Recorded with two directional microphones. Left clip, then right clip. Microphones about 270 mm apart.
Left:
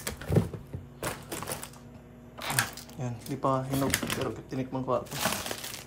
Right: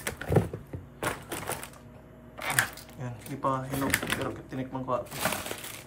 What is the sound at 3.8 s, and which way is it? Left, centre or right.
Speech, centre.